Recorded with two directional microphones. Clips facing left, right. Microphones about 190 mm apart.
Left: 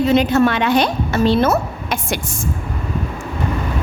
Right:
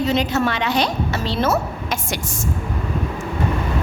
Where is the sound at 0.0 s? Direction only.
55° left (ahead or behind).